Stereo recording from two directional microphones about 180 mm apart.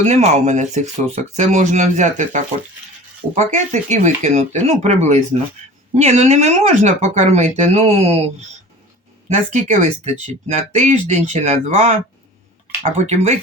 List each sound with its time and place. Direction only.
0.0 s speech: 35° right (ahead or behind)
9.3 s speech: 40° right (ahead or behind)